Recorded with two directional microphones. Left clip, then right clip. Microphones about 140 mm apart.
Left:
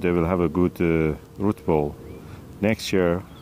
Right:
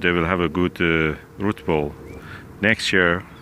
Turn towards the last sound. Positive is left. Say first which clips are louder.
# right 4 dB
turn(degrees=15)  # may be behind; listen again after turning